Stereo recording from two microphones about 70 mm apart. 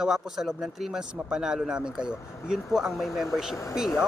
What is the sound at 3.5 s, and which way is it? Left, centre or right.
Speech, left.